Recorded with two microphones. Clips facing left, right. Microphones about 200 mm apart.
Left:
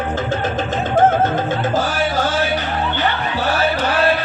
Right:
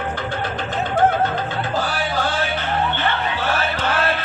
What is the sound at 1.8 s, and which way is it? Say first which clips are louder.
Music: left 4 dB; 45° left (ahead or behind).